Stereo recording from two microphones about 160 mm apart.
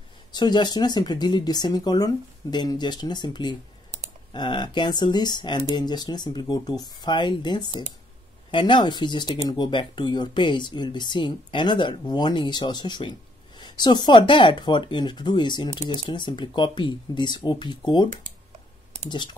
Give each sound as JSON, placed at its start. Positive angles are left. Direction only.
{"t": 0.3, "sound": "speech", "side_deg": 25}